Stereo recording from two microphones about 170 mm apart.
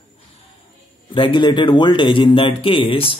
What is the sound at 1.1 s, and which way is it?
Speech, 30° left (ahead or behind).